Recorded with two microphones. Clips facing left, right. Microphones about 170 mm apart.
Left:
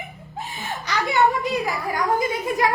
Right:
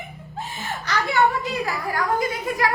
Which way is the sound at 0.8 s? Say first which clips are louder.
Left 1 dB; 15° left (ahead or behind).